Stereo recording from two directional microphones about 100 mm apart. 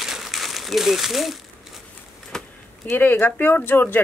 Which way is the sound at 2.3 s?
5° left (ahead or behind).